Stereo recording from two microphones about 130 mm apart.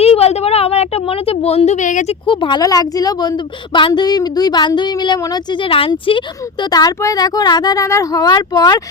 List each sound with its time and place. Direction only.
0.0 s speech: 50° left (ahead or behind); by 2.1 s 70° left (ahead or behind)
2.2 s a woman's voice: 40° left (ahead or behind)